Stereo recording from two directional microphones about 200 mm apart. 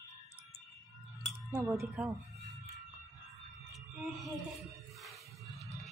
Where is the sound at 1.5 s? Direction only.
15° right (ahead or behind).